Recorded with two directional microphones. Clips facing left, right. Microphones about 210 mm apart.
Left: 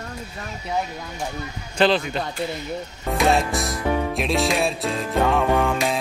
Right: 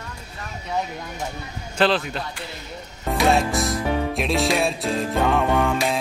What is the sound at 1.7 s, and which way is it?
Music, centre (ahead or behind).